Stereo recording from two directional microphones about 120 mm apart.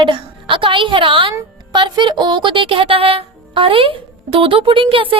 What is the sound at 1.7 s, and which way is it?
Music, 40° right (ahead or behind).